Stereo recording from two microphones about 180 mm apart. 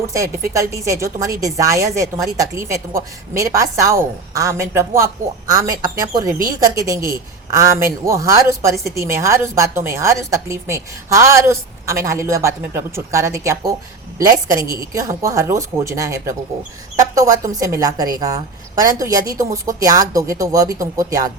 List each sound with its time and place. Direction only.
0.1 s a woman's voice: 15° right (ahead or behind)